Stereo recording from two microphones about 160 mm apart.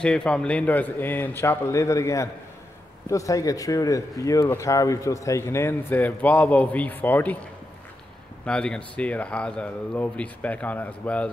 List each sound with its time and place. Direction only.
0.0 s speech: 5° left (ahead or behind)
8.5 s speech: 5° left (ahead or behind)